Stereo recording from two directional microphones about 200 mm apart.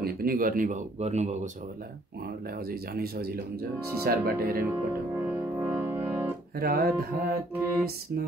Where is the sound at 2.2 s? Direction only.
50° right (ahead or behind).